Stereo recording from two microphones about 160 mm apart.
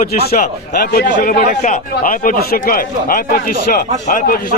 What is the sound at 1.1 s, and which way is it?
A man's voice, 55° left (ahead or behind).